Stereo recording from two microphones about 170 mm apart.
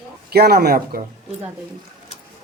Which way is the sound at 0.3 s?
65° right (ahead or behind).